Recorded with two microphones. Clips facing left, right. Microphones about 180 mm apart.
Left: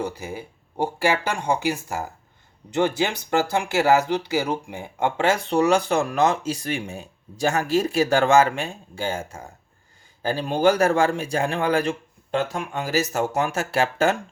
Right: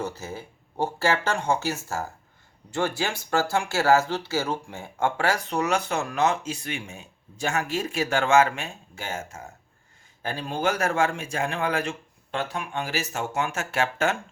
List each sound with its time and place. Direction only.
0.0 s speech: 15° left (ahead or behind); by 14.2 s 35° left (ahead or behind)